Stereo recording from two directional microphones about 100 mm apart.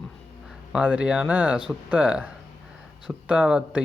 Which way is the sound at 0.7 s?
10° right (ahead or behind).